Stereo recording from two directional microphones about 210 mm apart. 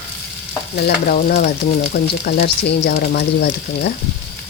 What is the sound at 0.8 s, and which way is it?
Speech, 50° left (ahead or behind).